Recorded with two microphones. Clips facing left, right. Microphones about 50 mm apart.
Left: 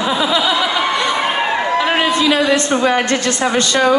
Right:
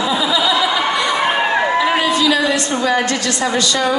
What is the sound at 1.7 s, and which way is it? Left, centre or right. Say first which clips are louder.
A woman's voice: even; left.